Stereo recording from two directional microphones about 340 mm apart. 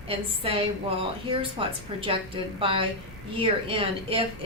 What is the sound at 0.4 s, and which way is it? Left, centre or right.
Speech, centre.